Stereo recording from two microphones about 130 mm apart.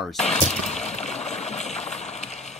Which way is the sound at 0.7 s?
60° left (ahead or behind).